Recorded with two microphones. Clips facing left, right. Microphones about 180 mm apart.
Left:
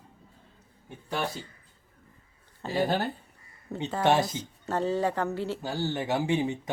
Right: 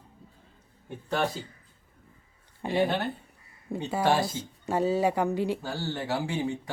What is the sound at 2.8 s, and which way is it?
Speech, 40° left (ahead or behind).